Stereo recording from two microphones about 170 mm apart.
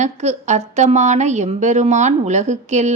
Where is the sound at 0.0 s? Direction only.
40° right (ahead or behind).